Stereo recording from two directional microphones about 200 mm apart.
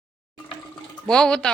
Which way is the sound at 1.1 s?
5° left (ahead or behind).